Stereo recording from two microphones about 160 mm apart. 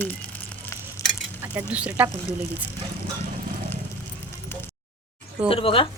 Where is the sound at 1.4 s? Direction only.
10° right (ahead or behind).